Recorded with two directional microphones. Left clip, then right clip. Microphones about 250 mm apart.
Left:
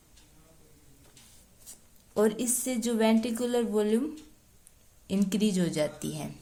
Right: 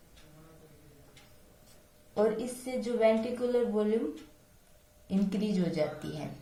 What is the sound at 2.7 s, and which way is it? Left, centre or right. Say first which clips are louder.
Speech: right 1 dB; left.